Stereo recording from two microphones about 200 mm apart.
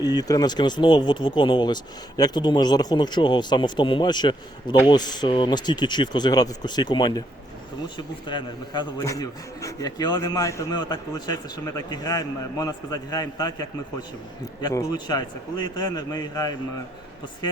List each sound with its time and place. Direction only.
0.0 s a man's voice: 20° left (ahead or behind)